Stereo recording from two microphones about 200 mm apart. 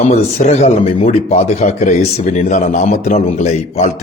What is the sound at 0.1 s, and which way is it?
A man's voice, 35° left (ahead or behind).